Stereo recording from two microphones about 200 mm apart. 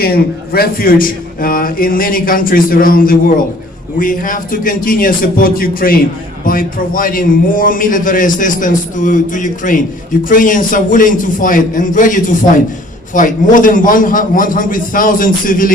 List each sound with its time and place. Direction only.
0.0 s a man's voice: 50° left (ahead or behind)